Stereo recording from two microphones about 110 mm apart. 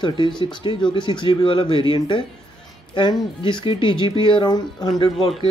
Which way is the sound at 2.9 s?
45° left (ahead or behind).